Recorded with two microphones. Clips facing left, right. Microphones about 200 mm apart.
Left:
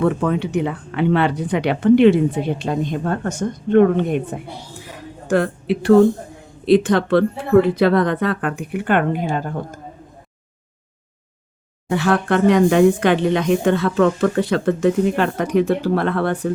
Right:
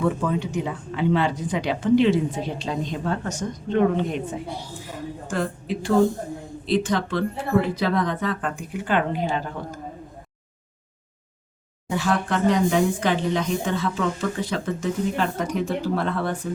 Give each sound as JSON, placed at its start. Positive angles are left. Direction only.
{"t": 0.0, "sound": "a woman's voice", "side_deg": 65}
{"t": 11.9, "sound": "a woman's voice", "side_deg": 65}